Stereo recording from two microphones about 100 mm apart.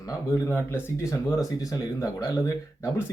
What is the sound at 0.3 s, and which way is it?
Speech, 25° left (ahead or behind).